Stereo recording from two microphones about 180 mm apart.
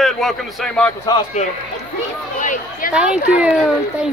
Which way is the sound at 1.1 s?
30° left (ahead or behind).